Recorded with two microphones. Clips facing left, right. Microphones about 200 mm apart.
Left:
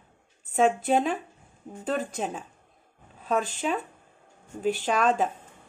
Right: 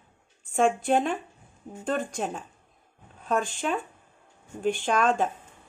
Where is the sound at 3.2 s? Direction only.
5° left (ahead or behind).